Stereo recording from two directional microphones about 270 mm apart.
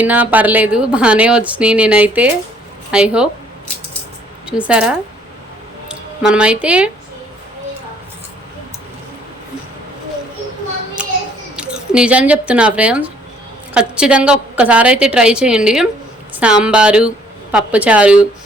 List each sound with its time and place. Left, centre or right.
0.0 s a woman's voice: centre
4.4 s a woman's voice: centre
11.0 s child singing: centre
11.5 s a woman's voice: centre